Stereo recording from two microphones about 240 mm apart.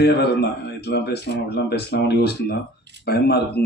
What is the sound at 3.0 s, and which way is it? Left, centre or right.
Speech, left.